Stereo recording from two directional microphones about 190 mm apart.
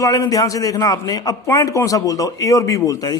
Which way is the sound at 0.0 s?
15° left (ahead or behind).